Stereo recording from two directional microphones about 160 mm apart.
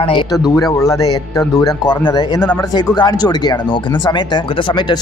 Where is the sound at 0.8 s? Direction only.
20° left (ahead or behind).